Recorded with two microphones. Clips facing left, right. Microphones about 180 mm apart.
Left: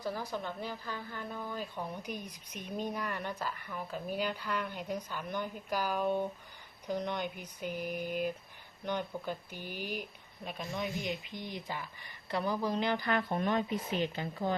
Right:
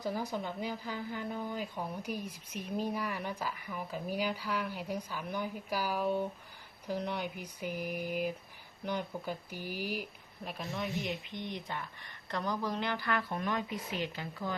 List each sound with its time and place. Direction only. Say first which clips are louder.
0.0 s speech: right 1 dB; 15° right (ahead or behind); by 14.5 s 25° left (ahead or behind)